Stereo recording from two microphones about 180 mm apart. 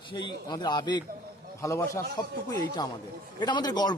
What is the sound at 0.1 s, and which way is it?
A man's voice, 25° left (ahead or behind).